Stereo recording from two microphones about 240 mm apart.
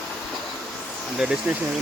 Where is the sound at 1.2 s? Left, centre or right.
Centre.